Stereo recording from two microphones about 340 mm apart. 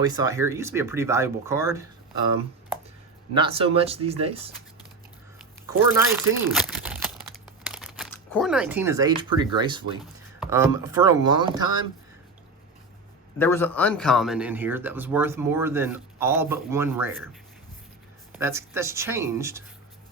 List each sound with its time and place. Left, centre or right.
0.3 s speech: centre
3.3 s speech: centre
5.4 s crumpling: centre
7.6 s speech: centre
13.4 s speech: centre
18.3 s speech: centre